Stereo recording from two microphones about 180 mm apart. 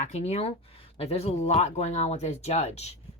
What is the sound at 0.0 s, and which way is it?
Speech, 40° left (ahead or behind).